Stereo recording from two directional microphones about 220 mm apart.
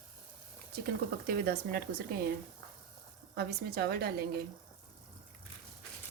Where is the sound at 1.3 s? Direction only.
45° right (ahead or behind).